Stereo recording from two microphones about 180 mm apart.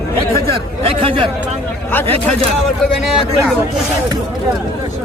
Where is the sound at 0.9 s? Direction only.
30° right (ahead or behind).